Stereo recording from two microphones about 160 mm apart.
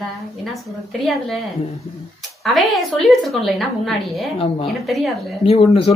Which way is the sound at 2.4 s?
Centre (ahead or behind).